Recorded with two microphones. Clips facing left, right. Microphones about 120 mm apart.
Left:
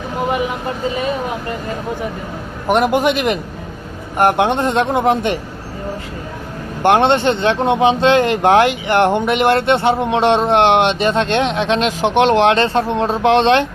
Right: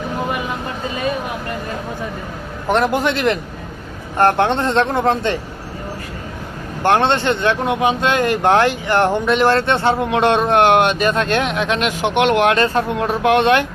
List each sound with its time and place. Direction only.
2.6 s speech: 15° left (ahead or behind)
6.8 s speech: 20° left (ahead or behind)